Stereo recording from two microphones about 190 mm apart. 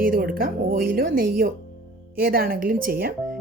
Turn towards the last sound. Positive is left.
turn(degrees=-50)  # may be behind; listen again after turning